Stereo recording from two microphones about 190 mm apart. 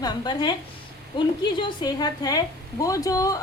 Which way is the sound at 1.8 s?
20° left (ahead or behind).